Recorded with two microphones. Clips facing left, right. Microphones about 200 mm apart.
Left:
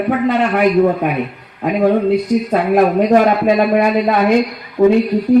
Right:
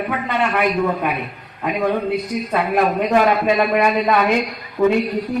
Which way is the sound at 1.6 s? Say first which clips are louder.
Left 6 dB; 35° left (ahead or behind).